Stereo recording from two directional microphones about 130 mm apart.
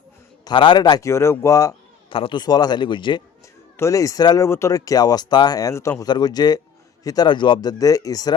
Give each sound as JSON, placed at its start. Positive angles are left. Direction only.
{"t": 0.4, "sound": "speech", "side_deg": 35}
{"t": 2.0, "sound": "a man's voice", "side_deg": 40}
{"t": 3.8, "sound": "a man's voice", "side_deg": 25}